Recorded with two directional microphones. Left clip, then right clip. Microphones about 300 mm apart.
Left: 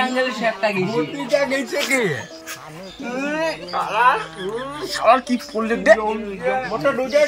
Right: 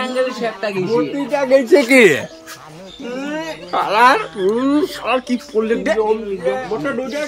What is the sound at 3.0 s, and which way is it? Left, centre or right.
Speech, centre.